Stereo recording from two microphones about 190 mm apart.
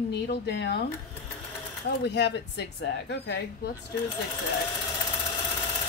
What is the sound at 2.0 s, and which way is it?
A woman's voice, 65° left (ahead or behind).